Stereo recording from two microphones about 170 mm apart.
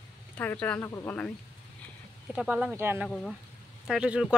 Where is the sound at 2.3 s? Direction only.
5° right (ahead or behind).